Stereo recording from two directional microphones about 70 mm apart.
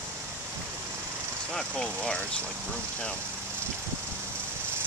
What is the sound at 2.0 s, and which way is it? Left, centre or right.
Speech, centre.